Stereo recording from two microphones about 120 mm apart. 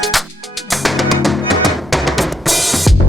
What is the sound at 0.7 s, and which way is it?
Drum, centre (ahead or behind).